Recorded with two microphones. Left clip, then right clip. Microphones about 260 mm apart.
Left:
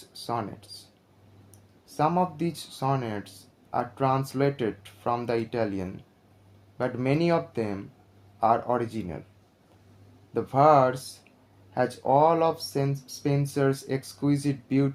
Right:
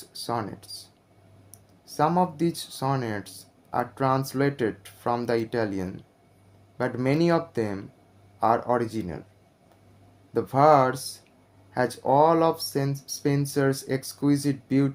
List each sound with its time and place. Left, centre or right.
0.1 s speech: right
2.0 s speech: right
10.3 s speech: right